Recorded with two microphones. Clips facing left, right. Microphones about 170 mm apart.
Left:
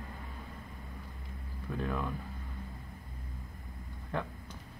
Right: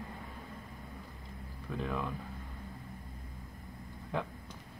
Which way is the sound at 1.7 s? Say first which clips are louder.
Left 1 dB; centre (ahead or behind).